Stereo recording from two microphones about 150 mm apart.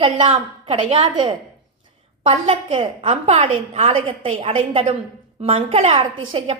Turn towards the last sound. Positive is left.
turn(degrees=-40)  # may be behind; listen again after turning